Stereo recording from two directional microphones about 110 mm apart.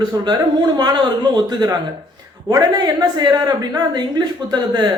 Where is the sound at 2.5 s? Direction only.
40° right (ahead or behind).